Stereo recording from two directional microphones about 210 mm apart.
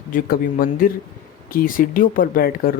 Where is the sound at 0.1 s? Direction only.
40° left (ahead or behind).